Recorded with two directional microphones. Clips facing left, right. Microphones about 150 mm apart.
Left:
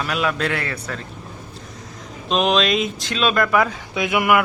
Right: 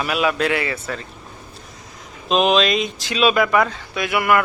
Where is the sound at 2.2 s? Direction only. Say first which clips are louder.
Right 2 dB; centre (ahead or behind).